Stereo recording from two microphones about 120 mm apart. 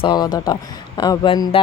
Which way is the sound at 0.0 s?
35° left (ahead or behind).